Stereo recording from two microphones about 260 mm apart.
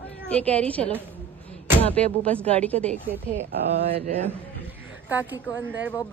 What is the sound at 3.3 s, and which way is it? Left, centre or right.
Speech, right.